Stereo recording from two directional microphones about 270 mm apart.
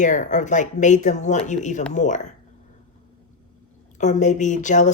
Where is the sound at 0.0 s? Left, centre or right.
Left.